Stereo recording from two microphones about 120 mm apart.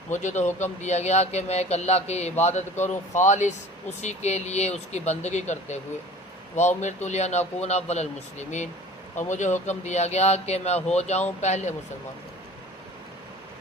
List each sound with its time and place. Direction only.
0.1 s speech: 85° left; by 2.6 s 70° left (ahead or behind)
3.2 s speech: 85° left